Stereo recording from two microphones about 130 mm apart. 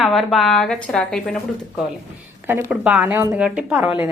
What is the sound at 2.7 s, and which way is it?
Speech, 10° right (ahead or behind).